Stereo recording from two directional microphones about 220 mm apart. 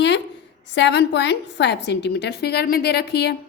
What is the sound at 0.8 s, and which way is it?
A woman's voice, 50° left (ahead or behind).